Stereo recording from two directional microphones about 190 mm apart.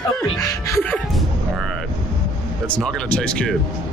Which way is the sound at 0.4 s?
15° left (ahead or behind).